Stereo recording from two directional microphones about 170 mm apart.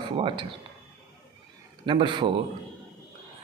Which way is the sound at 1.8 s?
30° right (ahead or behind).